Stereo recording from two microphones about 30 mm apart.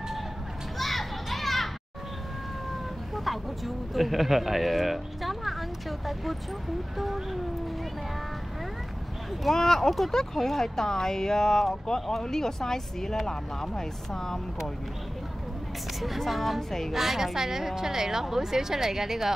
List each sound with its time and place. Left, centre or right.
0.7 s children playing: centre
3.3 s speech: centre
9.4 s speech: centre
16.0 s a woman's voice: centre